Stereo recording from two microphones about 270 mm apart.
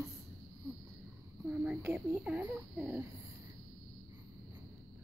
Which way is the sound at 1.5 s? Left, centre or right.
Centre.